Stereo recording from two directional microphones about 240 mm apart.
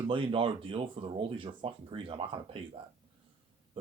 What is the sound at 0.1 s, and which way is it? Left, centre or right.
Speech, right.